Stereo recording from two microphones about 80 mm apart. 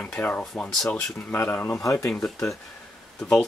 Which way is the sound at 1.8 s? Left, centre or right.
Left.